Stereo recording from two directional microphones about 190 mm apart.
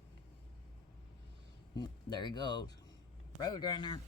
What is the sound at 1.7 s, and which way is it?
Speech, 20° left (ahead or behind).